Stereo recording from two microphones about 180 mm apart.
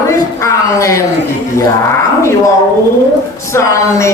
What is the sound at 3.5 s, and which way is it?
Speech, 15° left (ahead or behind).